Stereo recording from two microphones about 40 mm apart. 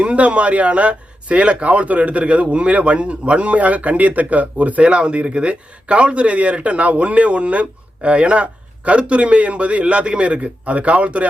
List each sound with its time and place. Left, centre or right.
0.0 s speech: right